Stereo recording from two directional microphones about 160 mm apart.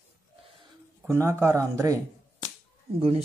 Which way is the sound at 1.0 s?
15° right (ahead or behind).